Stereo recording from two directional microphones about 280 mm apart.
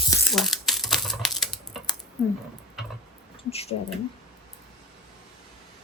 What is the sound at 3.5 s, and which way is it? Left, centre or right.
Speech, left.